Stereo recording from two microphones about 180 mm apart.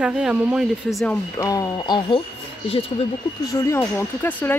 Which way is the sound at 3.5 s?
15° left (ahead or behind).